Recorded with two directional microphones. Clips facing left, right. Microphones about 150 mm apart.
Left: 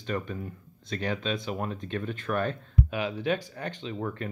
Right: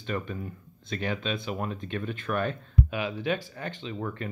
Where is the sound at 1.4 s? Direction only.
30° left (ahead or behind).